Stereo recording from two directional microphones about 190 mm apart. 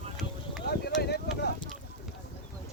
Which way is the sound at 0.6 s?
60° left (ahead or behind).